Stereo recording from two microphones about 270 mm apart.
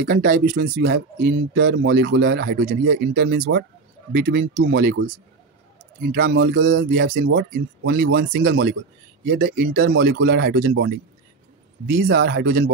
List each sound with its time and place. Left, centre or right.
0.0 s speech: right
6.1 s speech: right
6.9 s speech: right